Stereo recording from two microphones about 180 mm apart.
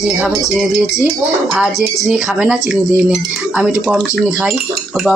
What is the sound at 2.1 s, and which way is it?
A man's voice, 5° right (ahead or behind).